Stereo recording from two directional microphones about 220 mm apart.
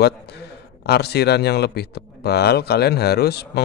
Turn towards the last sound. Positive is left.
turn(degrees=45)  # may be behind; listen again after turning